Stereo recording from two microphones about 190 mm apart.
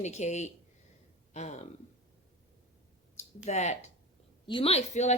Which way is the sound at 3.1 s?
35° left (ahead or behind).